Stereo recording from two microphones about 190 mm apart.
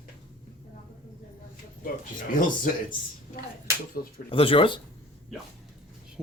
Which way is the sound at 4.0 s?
50° left (ahead or behind).